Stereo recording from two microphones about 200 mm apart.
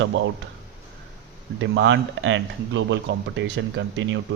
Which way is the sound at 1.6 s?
65° right (ahead or behind).